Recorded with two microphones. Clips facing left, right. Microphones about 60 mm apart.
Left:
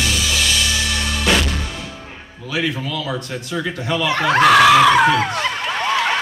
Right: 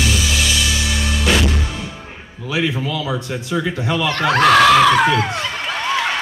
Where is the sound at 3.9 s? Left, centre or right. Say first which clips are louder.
Left 1 dB; centre.